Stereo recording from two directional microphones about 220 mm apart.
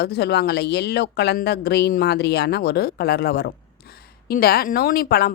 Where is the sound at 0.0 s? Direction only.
45° left (ahead or behind).